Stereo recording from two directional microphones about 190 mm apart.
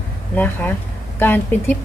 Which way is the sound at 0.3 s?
10° left (ahead or behind).